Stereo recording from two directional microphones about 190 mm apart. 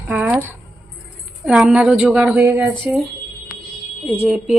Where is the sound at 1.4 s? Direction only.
5° right (ahead or behind).